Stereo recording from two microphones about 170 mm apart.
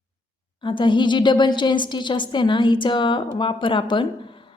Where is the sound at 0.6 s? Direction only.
30° left (ahead or behind).